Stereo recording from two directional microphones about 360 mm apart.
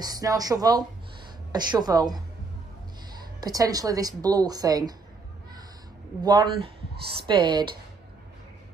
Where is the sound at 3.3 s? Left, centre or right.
Centre.